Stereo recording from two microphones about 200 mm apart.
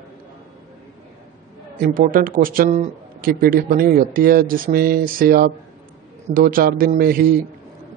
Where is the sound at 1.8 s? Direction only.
45° right (ahead or behind).